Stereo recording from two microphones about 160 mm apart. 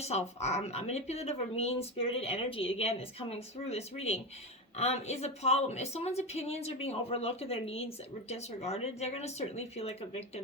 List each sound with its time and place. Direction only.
0.0 s a woman's voice: 45° left (ahead or behind)